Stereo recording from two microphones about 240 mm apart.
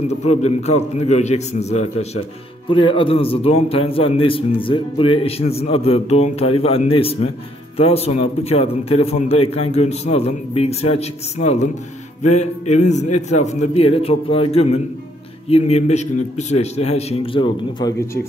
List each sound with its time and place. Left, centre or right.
0.1 s a man's voice: left